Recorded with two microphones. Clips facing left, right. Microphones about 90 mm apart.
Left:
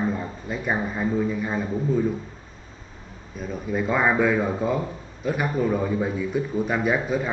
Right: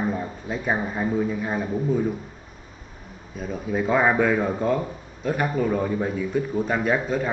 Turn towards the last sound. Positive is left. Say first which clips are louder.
# even
turn(degrees=0)  # may be behind; listen again after turning